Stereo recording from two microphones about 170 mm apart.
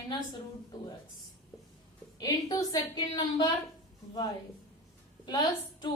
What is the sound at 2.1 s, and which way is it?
A woman's voice, 20° left (ahead or behind).